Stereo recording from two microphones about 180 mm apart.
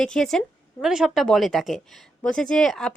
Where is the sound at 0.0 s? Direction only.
5° left (ahead or behind).